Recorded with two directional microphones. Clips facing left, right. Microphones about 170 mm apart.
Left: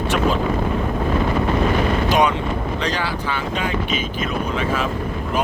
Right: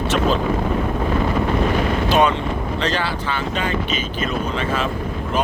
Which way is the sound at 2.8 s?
10° left (ahead or behind).